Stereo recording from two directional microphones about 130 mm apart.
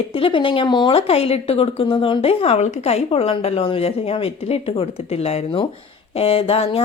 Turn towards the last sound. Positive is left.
turn(degrees=50)  # may be behind; listen again after turning